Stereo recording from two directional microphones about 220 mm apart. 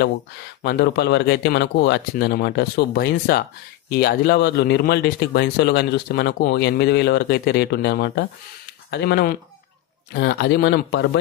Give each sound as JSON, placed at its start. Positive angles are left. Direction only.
{"t": 0.6, "sound": "speech", "side_deg": 50}